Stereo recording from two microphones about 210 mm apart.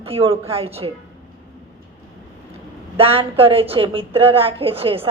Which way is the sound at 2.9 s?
25° right (ahead or behind).